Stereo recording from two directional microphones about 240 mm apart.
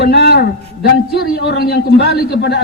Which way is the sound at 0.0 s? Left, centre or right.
Left.